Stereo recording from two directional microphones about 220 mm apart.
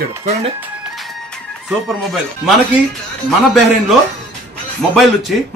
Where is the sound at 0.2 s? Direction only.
30° right (ahead or behind).